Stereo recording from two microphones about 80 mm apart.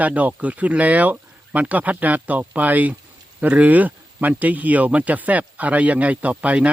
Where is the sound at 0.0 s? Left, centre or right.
Centre.